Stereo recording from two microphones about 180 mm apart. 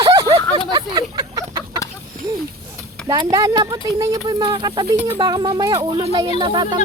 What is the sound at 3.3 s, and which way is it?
Speech, 20° right (ahead or behind).